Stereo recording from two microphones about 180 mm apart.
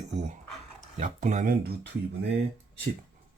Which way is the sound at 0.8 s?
40° right (ahead or behind).